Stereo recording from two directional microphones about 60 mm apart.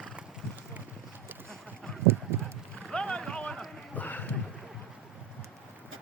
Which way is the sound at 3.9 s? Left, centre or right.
Left.